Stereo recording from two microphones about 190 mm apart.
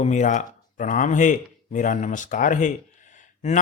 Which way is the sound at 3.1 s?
40° left (ahead or behind).